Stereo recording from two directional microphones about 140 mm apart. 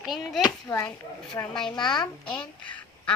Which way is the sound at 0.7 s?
30° left (ahead or behind).